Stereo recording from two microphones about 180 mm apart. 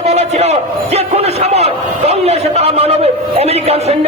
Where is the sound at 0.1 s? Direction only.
35° right (ahead or behind).